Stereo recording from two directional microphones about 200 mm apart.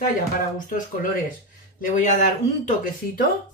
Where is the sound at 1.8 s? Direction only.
40° left (ahead or behind).